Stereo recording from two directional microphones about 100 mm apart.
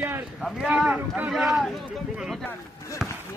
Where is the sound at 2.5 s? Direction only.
30° left (ahead or behind).